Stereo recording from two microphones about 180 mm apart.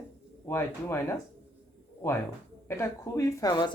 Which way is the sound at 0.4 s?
15° left (ahead or behind).